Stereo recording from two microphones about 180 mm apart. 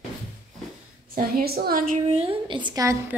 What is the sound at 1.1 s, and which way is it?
Speech, 55° right (ahead or behind).